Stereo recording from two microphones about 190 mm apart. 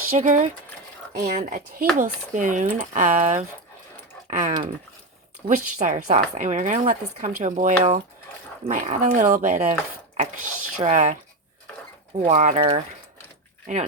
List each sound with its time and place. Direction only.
0.2 s speech: 40° right (ahead or behind)
12.2 s speech: 40° right (ahead or behind)